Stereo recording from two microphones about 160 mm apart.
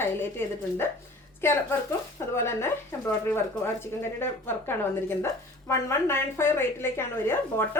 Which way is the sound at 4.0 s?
15° left (ahead or behind).